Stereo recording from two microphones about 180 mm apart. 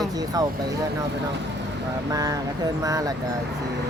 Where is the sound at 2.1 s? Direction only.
20° right (ahead or behind).